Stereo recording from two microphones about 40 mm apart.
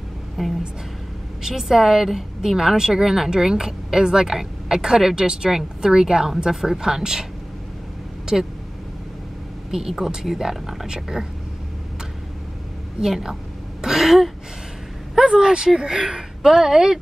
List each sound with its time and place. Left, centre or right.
0.4 s a woman's voice: centre
8.3 s a woman's voice: centre
9.7 s a woman's voice: centre
13.0 s a sound: centre
15.1 s speech: centre